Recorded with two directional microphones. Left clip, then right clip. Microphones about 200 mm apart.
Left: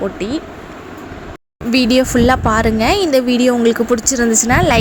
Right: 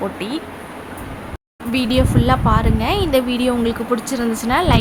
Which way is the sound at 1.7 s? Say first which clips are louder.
Left 5 dB; 20° left (ahead or behind).